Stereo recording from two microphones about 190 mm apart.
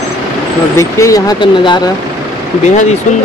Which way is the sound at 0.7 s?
15° left (ahead or behind).